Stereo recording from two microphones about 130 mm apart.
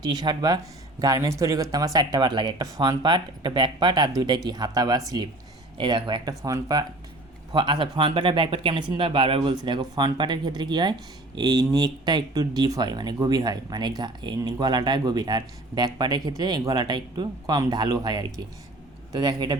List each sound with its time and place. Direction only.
0.0 s speech: 35° right (ahead or behind)